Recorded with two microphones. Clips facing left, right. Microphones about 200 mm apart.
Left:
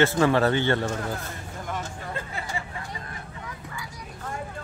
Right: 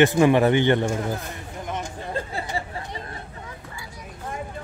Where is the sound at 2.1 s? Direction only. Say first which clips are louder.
Right 7 dB; 35° right (ahead or behind).